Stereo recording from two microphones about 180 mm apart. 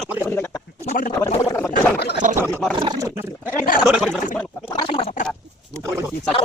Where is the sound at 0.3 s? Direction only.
15° left (ahead or behind).